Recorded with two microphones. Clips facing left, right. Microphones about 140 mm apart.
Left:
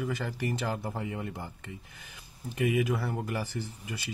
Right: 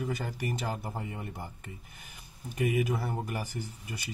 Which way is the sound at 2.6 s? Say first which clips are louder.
Left 1 dB; 15° right (ahead or behind).